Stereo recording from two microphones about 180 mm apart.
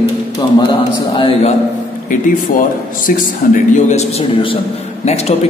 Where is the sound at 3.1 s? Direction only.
50° left (ahead or behind).